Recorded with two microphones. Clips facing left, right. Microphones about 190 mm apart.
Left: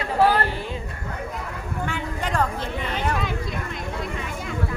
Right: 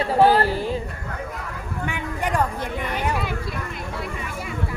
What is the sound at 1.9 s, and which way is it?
Speech, 15° right (ahead or behind).